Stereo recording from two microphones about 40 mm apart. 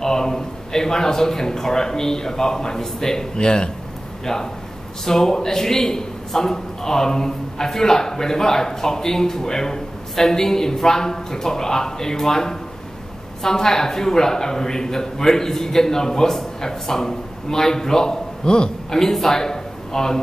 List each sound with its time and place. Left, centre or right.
0.0 s a man's voice: centre